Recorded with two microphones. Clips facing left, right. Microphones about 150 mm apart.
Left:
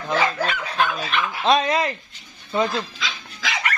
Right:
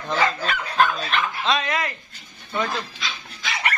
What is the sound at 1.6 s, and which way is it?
Speech, 30° left (ahead or behind).